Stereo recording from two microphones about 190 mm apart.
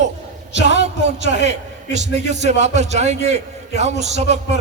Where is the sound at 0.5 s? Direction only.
70° left (ahead or behind).